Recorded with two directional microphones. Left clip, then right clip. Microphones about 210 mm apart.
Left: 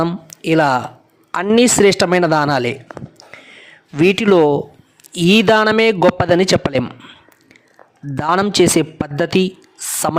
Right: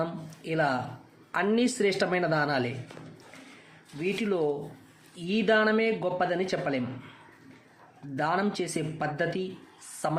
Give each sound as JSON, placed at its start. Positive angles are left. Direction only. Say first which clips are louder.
{"t": 0.0, "sound": "speech", "louder": "left 13 dB", "side_deg": 50}
{"t": 4.0, "sound": "speech", "louder": "left 17 dB", "side_deg": 55}
{"t": 8.1, "sound": "speech", "louder": "left 12 dB", "side_deg": 50}